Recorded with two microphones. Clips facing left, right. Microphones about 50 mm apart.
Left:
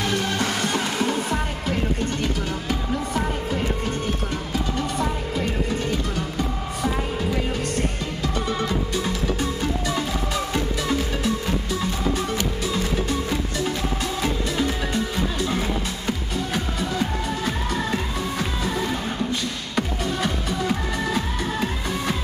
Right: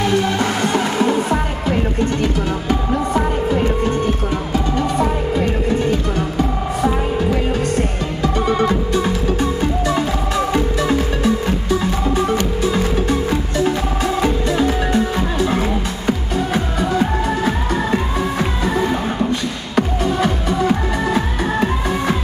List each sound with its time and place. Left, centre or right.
0.0 s music: centre
8.5 s music: right
19.7 s music: centre